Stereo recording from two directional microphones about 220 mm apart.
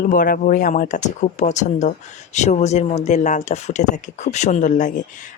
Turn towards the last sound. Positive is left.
turn(degrees=35)  # may be behind; listen again after turning